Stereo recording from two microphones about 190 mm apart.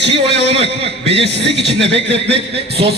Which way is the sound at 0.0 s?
65° right (ahead or behind).